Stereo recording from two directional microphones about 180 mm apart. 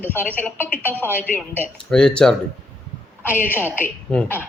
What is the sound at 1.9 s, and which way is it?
A woman's voice, 5° left (ahead or behind).